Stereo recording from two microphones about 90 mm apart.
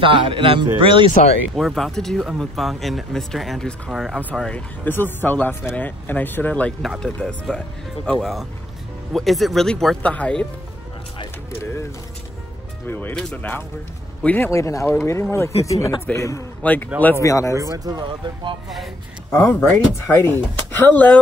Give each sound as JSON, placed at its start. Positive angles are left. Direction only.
{"t": 0.0, "sound": "a man's voice", "side_deg": -75}
{"t": 1.5, "sound": "speech", "side_deg": 0}
{"t": 4.8, "sound": "speech", "side_deg": 25}
{"t": 11.5, "sound": "pigeon", "side_deg": 30}
{"t": 12.8, "sound": "speech", "side_deg": 25}
{"t": 13.1, "sound": "speech", "side_deg": 10}
{"t": 14.5, "sound": "speech", "side_deg": 35}
{"t": 16.6, "sound": "speech", "side_deg": 20}
{"t": 17.2, "sound": "speech", "side_deg": 35}
{"t": 17.6, "sound": "speech", "side_deg": -40}
{"t": 18.0, "sound": "speech", "side_deg": -65}
{"t": 19.4, "sound": "speech", "side_deg": 25}